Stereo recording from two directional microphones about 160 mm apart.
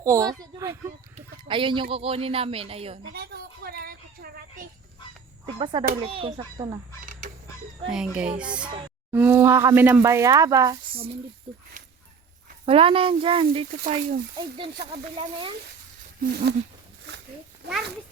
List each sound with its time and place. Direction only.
0.0 s a sound: 20° right (ahead or behind)
1.1 s speech: 30° right (ahead or behind)
3.1 s a sound: 85° right; by 4.7 s 65° right (ahead or behind)
5.5 s a child's voice: 30° right (ahead or behind)
7.0 s fowl: 55° right (ahead or behind)
7.9 s speech: 5° right (ahead or behind); by 10.8 s 20° right (ahead or behind)
11.8 s dog: 50° right (ahead or behind)
12.6 s speech: 35° right (ahead or behind)
13.8 s speech: 50° right (ahead or behind)
16.2 s speech: 85° right
17.6 s a sound: 90° right